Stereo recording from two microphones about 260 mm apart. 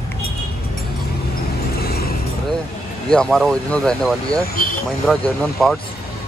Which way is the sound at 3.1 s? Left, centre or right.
Centre.